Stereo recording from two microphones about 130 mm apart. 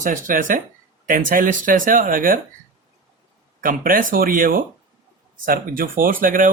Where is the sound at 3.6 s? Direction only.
90° right.